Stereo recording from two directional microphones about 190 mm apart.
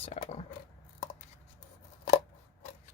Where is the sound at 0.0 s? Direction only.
35° left (ahead or behind).